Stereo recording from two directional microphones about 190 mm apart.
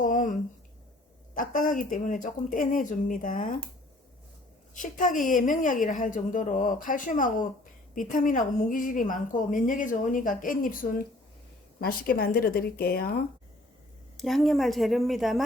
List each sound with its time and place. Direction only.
0.0 s a sound: 45° left (ahead or behind)
1.3 s a woman's voice: 45° left (ahead or behind)
4.7 s a woman's voice: 45° left (ahead or behind)
14.2 s a woman's voice: centre (ahead or behind)